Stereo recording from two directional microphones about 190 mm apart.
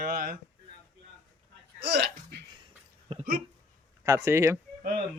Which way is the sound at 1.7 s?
60° right (ahead or behind).